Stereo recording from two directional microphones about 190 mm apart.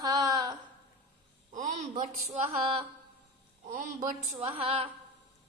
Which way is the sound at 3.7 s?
45° right (ahead or behind).